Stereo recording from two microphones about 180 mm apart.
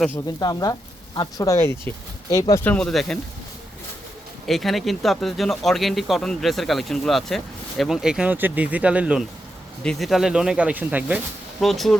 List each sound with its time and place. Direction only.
0.3 s speech: 20° left (ahead or behind)
2.7 s speech: centre (ahead or behind)
4.4 s speech: centre (ahead or behind)